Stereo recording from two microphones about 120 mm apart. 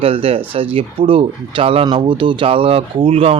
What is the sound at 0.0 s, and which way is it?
Speech, 50° right (ahead or behind).